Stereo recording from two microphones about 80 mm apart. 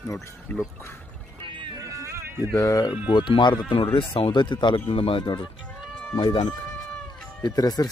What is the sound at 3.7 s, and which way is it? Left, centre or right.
Speech, left.